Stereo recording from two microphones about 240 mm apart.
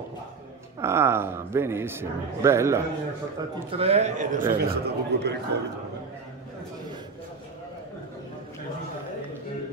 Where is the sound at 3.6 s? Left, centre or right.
Right.